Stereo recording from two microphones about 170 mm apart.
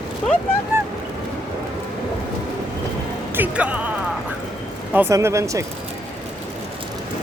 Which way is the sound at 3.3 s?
5° right (ahead or behind).